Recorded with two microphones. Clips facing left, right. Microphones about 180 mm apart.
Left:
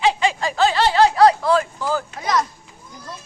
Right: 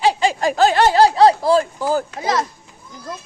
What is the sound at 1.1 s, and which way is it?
Laughter, 30° right (ahead or behind).